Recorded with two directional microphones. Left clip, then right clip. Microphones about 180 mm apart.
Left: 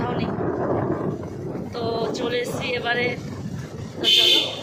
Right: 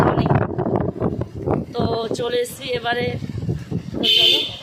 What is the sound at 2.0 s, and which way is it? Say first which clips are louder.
Speech: right 3 dB; 35° right (ahead or behind).